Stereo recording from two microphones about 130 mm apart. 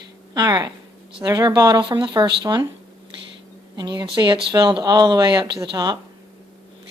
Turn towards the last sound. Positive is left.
turn(degrees=-30)  # may be behind; listen again after turning